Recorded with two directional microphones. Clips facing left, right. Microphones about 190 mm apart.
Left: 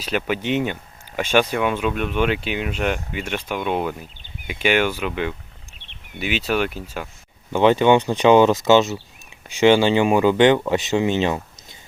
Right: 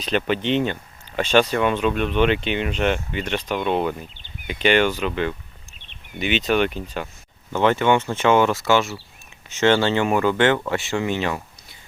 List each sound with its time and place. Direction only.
0.0 s speech: 5° left (ahead or behind)